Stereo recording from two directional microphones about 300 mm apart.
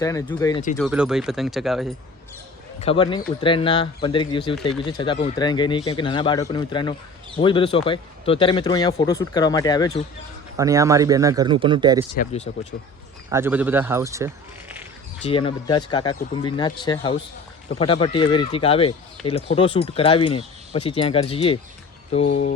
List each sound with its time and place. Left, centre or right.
0.0 s a man's voice: centre
0.8 s speech: centre
2.8 s a man's voice: centre
10.6 s speech: centre
12.1 s speech: left
13.3 s speech: centre
15.2 s a man's voice: centre